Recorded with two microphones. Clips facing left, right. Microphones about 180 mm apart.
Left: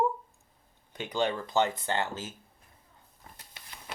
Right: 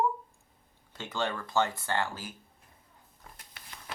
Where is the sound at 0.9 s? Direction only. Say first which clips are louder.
Left 4 dB; 15° left (ahead or behind).